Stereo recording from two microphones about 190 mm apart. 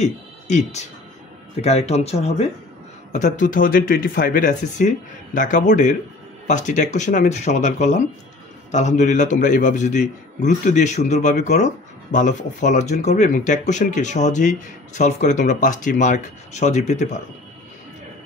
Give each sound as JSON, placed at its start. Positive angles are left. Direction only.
{"t": 0.0, "sound": "speech", "side_deg": 40}